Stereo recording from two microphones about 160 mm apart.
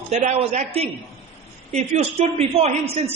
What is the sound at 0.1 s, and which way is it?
A man's voice, 40° right (ahead or behind).